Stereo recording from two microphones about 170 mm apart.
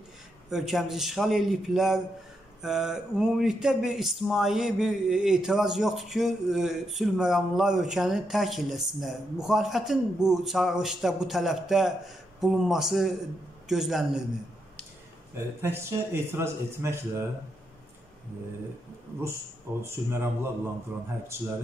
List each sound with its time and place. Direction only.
0.5 s speech: centre (ahead or behind)
15.3 s a man's voice: 15° right (ahead or behind)
19.8 s a man's voice: 15° right (ahead or behind)